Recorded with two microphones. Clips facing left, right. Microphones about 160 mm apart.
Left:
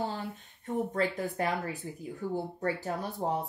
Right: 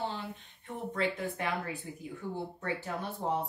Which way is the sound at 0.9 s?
40° left (ahead or behind).